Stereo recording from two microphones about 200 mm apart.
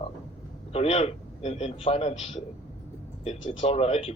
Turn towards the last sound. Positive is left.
turn(degrees=30)  # may be behind; listen again after turning